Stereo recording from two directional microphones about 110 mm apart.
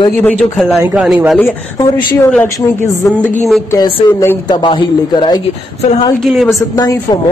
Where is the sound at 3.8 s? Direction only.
35° left (ahead or behind).